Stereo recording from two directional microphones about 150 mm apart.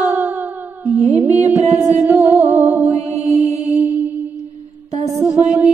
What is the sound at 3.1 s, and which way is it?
Mantra, 45° right (ahead or behind).